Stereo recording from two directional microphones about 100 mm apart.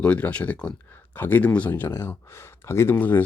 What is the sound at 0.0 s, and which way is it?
Speech, 10° left (ahead or behind).